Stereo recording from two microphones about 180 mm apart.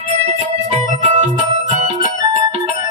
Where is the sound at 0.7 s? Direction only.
40° right (ahead or behind).